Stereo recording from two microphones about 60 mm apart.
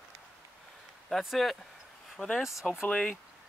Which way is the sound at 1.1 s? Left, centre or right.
Centre.